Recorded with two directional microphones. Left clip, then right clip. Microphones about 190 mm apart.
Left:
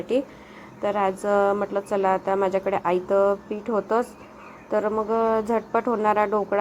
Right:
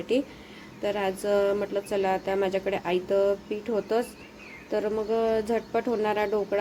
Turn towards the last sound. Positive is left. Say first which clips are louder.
# left 5 dB
turn(degrees=-5)  # may be behind; listen again after turning